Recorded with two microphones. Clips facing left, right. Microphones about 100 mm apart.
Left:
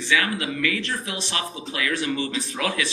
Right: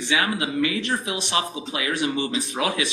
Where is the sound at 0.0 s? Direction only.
30° right (ahead or behind).